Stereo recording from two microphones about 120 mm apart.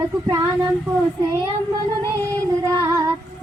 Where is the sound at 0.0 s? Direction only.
25° right (ahead or behind).